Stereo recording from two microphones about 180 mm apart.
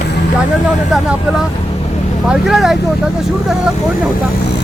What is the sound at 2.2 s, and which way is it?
Speech, centre (ahead or behind).